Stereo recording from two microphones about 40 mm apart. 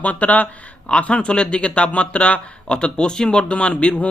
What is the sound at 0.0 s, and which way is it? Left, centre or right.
Speech, left.